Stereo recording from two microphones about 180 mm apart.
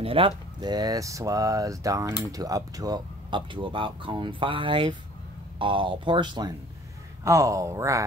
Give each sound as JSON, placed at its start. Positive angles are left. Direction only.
{"t": 0.0, "sound": "speech", "side_deg": -30}